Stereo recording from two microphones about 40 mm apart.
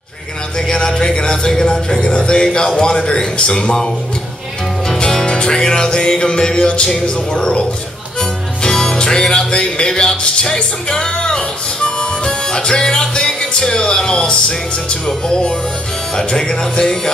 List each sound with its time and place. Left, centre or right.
0.6 s music: centre
8.2 s speech: centre
13.6 s music: centre
15.0 s speech: centre